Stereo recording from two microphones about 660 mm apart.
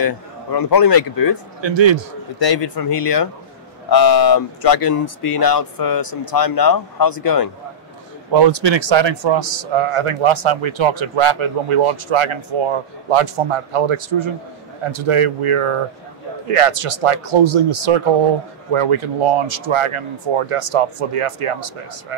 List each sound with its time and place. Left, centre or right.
0.5 s speech: left
1.6 s a man's voice: right
2.3 s speech: left
8.3 s a man's voice: right